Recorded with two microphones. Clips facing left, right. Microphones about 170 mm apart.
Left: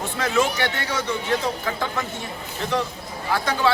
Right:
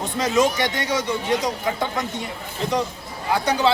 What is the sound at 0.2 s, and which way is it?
Speech, 20° right (ahead or behind).